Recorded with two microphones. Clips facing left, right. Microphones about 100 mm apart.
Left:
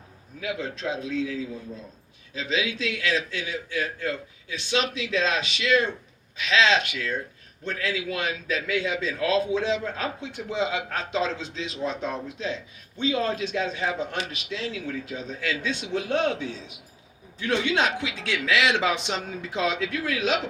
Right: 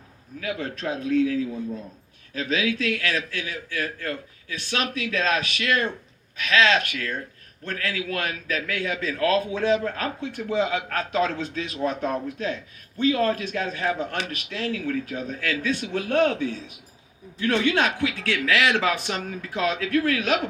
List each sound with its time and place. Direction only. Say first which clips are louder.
0.3 s a man's voice: right 1 dB; 55° right (ahead or behind)